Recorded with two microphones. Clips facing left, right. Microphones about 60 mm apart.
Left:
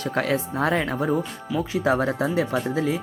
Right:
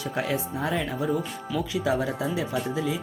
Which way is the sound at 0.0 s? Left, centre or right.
Left.